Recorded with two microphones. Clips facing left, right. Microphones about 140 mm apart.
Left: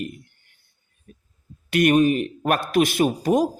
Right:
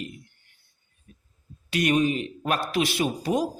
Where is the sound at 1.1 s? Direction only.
60° left (ahead or behind).